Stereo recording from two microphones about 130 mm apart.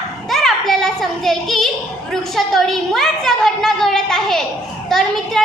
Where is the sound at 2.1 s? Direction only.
Centre (ahead or behind).